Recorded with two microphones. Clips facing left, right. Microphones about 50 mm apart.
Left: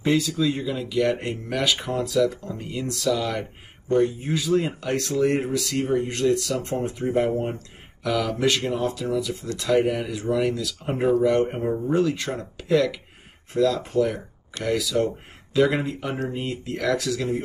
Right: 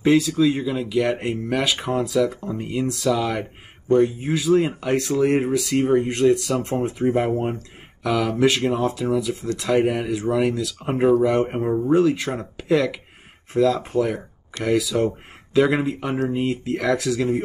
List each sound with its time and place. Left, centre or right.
0.0 s speech: centre